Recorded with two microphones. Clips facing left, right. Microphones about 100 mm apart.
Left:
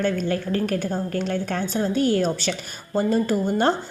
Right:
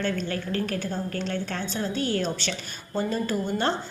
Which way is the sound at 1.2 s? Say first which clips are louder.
Left 5 dB; 45° left (ahead or behind).